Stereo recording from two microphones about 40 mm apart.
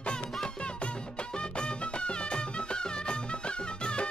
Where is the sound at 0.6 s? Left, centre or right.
Left.